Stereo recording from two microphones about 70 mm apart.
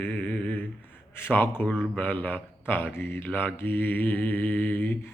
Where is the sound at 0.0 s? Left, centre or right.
Left.